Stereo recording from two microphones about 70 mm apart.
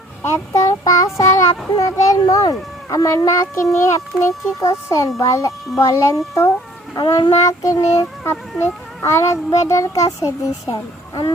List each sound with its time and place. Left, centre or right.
0.3 s a child's voice: left
6.9 s a child's voice: left
7.4 s a child's voice: left
8.2 s a child's voice: left